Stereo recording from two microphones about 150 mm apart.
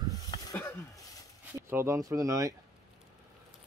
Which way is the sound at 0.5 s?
10° left (ahead or behind).